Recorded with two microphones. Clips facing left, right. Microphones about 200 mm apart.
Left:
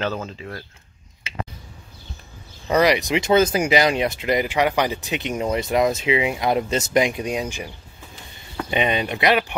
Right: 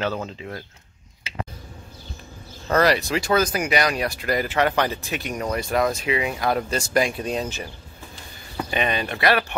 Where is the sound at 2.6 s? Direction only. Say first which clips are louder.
Left 2 dB; 15° left (ahead or behind).